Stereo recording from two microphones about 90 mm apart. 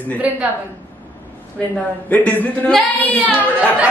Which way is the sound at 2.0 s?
20° left (ahead or behind).